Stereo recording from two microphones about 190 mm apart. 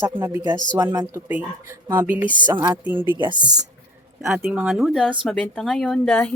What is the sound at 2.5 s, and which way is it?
Speech, 20° right (ahead or behind).